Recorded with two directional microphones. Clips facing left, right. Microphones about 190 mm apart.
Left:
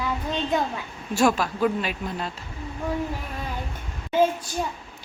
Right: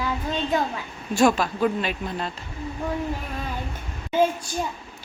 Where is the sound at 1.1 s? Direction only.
5° left (ahead or behind).